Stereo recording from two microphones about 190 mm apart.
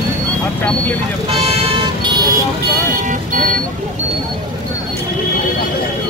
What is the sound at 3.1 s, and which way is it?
Speech, 45° right (ahead or behind).